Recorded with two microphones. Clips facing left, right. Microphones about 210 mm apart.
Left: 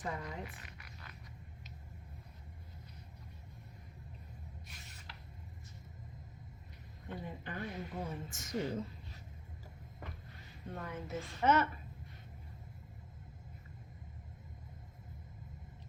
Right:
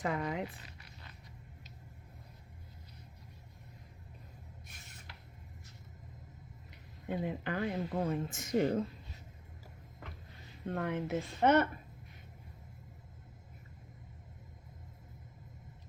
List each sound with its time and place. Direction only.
0.0 s speech: 80° right
4.7 s a sound: 50° right (ahead or behind)
7.1 s speech: 75° right (ahead or behind); by 8.8 s 55° right (ahead or behind)
10.7 s speech: 75° right (ahead or behind)